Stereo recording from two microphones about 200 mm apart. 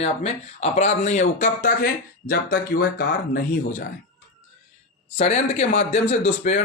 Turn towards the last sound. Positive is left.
turn(degrees=35)  # may be behind; listen again after turning